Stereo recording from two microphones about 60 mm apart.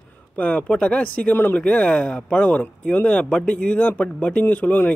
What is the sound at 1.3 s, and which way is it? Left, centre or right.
Speech, left.